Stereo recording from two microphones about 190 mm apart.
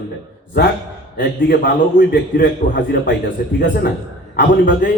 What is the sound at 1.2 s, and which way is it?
A man's voice, 50° left (ahead or behind).